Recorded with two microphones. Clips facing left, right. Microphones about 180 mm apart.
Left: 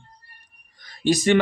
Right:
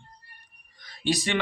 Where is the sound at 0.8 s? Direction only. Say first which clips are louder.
Left 7 dB; 45° left (ahead or behind).